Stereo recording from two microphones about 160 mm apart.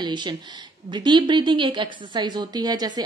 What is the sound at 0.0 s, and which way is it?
A woman's voice, 30° right (ahead or behind).